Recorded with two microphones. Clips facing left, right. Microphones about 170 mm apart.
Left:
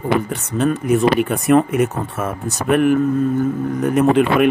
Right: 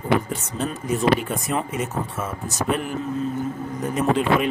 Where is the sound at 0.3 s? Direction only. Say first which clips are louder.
Left 8 dB; 65° left (ahead or behind).